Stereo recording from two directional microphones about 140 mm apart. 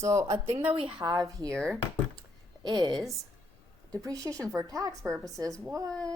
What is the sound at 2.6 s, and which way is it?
A woman's voice, 30° right (ahead or behind).